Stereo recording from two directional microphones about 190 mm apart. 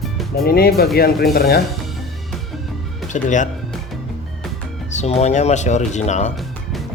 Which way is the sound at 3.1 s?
40° left (ahead or behind).